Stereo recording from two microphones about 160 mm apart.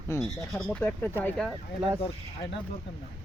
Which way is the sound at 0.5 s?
5° left (ahead or behind).